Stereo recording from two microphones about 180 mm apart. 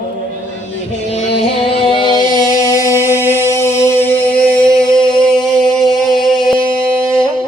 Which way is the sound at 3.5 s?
15° left (ahead or behind).